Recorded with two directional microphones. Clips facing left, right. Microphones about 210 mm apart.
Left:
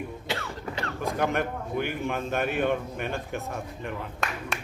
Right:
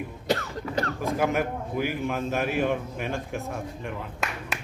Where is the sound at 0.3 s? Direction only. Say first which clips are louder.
Right 9 dB; 40° right (ahead or behind).